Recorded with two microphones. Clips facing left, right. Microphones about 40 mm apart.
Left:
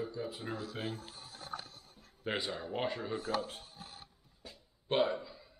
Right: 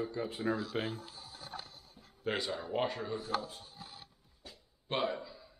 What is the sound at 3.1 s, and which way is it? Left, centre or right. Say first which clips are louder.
Speech: left 1 dB; left.